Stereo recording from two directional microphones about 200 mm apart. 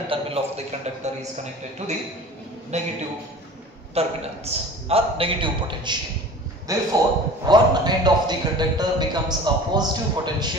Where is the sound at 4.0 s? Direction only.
30° right (ahead or behind).